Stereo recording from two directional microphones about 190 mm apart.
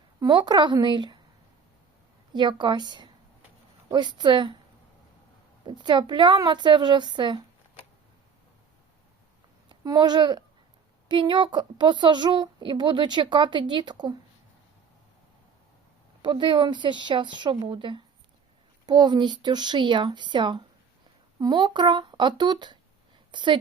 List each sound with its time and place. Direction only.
0.2 s a woman's voice: 25° right (ahead or behind)
2.3 s a woman's voice: 25° right (ahead or behind)
5.6 s a woman's voice: 25° right (ahead or behind)
9.6 s a woman's voice: 20° right (ahead or behind)
16.2 s a woman's voice: 25° right (ahead or behind)